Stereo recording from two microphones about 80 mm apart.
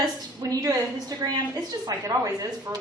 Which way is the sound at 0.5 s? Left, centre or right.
Right.